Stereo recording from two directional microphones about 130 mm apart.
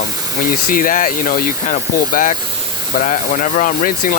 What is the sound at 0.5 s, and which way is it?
Speech, 90° left.